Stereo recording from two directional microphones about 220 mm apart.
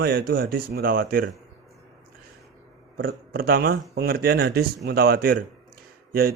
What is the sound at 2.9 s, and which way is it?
Speech, 40° right (ahead or behind).